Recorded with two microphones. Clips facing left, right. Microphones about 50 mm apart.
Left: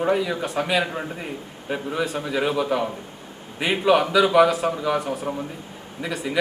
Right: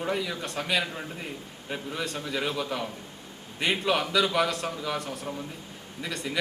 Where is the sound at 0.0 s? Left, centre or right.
Centre.